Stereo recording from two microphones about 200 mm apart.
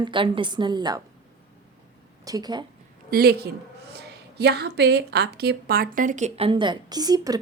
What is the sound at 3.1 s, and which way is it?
A woman's voice, 50° right (ahead or behind).